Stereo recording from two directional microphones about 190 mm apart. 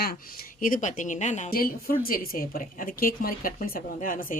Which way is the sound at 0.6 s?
45° left (ahead or behind).